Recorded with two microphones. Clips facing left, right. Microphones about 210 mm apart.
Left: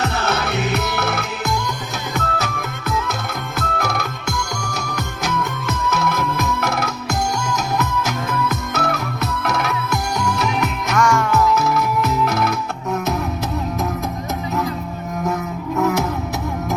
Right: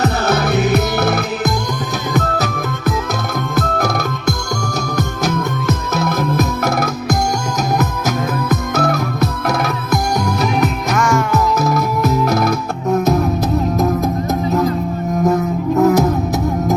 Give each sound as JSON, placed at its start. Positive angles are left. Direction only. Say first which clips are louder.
{"t": 0.0, "sound": "music", "louder": "right 5 dB", "side_deg": -35}
{"t": 8.4, "sound": "music", "louder": "right 5 dB", "side_deg": -40}
{"t": 10.9, "sound": "music", "louder": "left 1 dB", "side_deg": -5}
{"t": 11.6, "sound": "music", "louder": "right 3 dB", "side_deg": -40}
{"t": 15.2, "sound": "music", "louder": "right 8 dB", "side_deg": -35}